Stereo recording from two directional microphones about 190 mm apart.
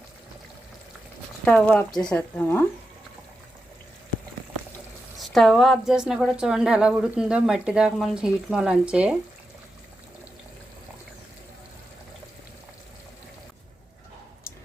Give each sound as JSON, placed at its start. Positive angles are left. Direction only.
{"t": 1.5, "sound": "speech", "side_deg": 5}
{"t": 5.1, "sound": "speech", "side_deg": 0}